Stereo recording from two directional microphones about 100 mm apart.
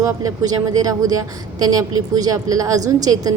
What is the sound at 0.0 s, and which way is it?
A woman's voice, 35° right (ahead or behind).